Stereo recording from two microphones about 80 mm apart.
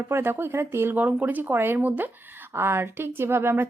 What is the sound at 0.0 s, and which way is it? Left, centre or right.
A woman's voice, right.